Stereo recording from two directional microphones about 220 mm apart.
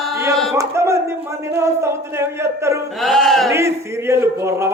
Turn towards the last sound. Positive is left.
turn(degrees=-10)  # may be behind; listen again after turning